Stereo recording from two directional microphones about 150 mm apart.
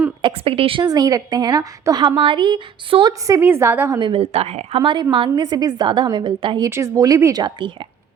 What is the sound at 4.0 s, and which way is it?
A woman's voice, 40° right (ahead or behind).